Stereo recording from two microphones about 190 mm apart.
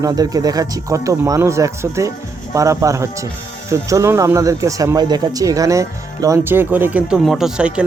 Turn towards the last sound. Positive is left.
turn(degrees=-5)  # may be behind; listen again after turning